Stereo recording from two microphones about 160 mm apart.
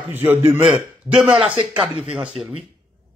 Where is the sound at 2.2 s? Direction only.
5° right (ahead or behind).